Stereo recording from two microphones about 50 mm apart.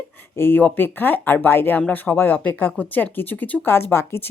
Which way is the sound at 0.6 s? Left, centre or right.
Left.